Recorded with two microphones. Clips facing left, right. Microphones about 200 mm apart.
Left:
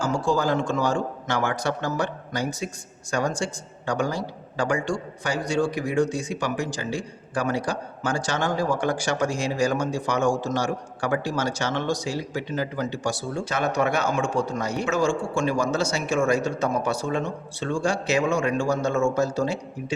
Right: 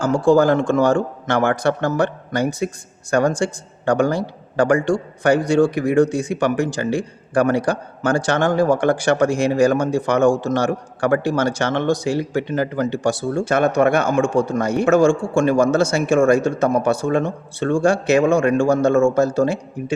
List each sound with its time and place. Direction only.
0.0 s a man's voice: 55° right (ahead or behind)